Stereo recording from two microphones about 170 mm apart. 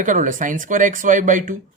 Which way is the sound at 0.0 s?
50° right (ahead or behind).